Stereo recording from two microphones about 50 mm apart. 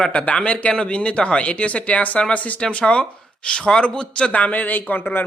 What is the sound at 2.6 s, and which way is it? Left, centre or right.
A man's voice, centre.